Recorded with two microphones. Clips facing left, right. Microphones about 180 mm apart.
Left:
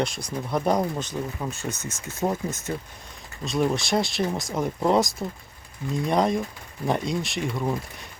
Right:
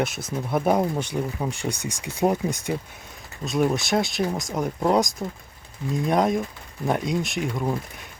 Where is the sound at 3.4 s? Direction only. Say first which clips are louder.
Right 2 dB; centre (ahead or behind).